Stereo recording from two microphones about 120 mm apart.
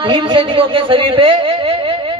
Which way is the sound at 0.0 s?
40° right (ahead or behind).